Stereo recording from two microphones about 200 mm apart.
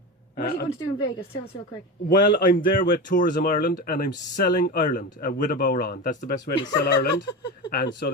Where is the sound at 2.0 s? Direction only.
45° left (ahead or behind).